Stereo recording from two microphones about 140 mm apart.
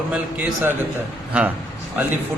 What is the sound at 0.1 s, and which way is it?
Speech, 10° right (ahead or behind).